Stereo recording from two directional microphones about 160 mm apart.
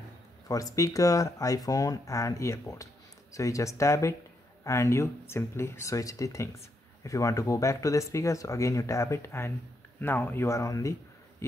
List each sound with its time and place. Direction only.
0.5 s a man's voice: 20° left (ahead or behind)